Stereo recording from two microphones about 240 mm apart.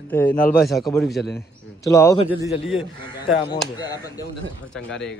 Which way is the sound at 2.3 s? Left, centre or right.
Centre.